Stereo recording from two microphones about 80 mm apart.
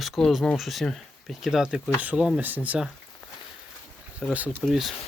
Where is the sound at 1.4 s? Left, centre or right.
Centre.